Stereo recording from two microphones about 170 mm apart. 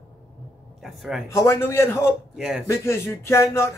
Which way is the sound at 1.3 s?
15° left (ahead or behind).